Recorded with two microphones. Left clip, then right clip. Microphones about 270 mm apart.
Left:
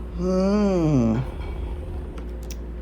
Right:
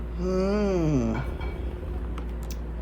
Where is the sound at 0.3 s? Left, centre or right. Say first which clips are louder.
Left 3 dB; left.